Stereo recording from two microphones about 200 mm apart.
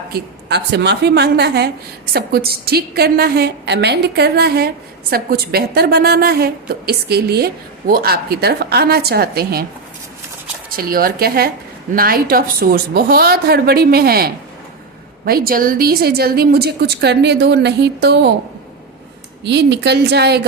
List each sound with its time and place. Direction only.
0.1 s a woman's voice: 55° right (ahead or behind)
10.8 s a woman's voice: 45° right (ahead or behind)
19.5 s a woman's voice: 60° right (ahead or behind)